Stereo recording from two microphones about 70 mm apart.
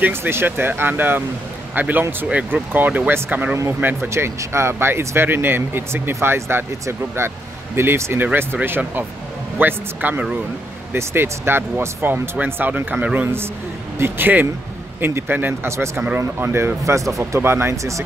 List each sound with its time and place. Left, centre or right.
0.0 s speech: right
3.8 s speech: right
13.9 s speech: right